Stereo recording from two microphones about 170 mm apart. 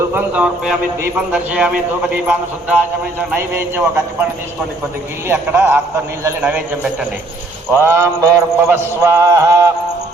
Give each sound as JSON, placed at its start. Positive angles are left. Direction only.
{"t": 0.1, "sound": "mantra", "side_deg": -10}
{"t": 5.3, "sound": "mantra", "side_deg": -15}